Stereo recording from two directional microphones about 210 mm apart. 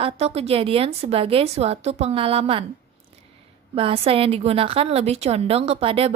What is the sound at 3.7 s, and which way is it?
A woman's voice, 25° right (ahead or behind).